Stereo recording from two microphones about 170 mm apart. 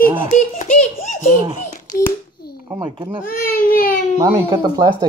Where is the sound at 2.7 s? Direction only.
30° right (ahead or behind).